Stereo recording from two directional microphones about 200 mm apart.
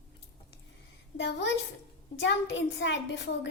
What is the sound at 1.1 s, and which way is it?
A child's voice, 60° left (ahead or behind).